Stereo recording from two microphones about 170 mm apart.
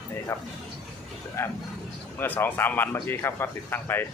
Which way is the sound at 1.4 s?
15° left (ahead or behind).